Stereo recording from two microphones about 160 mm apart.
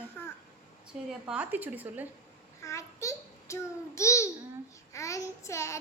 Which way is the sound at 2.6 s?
20° left (ahead or behind).